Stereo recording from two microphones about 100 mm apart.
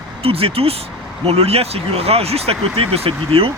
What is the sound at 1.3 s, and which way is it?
Speech, 85° right.